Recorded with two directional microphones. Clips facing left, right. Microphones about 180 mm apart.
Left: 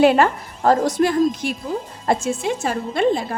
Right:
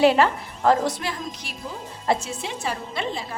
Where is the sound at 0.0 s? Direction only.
50° left (ahead or behind).